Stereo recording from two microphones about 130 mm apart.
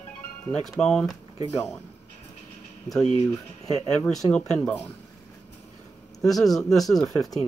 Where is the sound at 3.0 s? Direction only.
55° left (ahead or behind).